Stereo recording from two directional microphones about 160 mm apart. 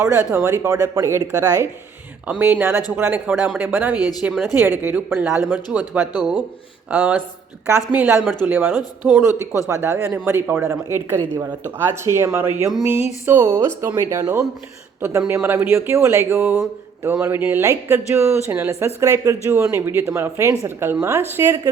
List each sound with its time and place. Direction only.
0.3 s speech: 15° right (ahead or behind)
2.2 s a woman's voice: 10° right (ahead or behind)
3.9 s speech: 25° left (ahead or behind)
4.2 s speech: centre (ahead or behind)
4.5 s a woman's voice: 15° right (ahead or behind)